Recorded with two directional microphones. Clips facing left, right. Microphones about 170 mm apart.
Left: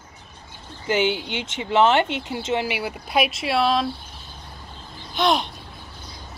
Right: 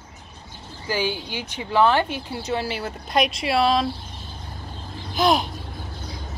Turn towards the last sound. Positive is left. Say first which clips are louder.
# right 1 dB
turn(degrees=0)  # may be behind; listen again after turning